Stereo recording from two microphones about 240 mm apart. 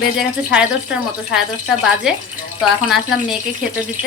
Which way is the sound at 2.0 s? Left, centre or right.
Centre.